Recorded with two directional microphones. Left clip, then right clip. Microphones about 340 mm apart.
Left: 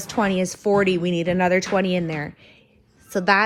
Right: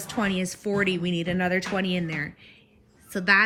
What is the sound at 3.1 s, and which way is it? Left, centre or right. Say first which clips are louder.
Speech: left 2 dB; centre.